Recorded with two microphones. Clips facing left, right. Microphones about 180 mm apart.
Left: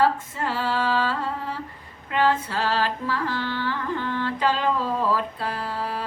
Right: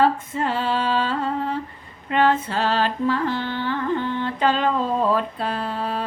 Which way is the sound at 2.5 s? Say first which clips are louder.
Right 3 dB; 25° right (ahead or behind).